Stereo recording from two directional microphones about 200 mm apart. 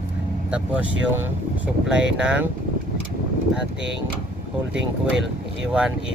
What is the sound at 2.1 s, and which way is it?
Speech, 5° right (ahead or behind).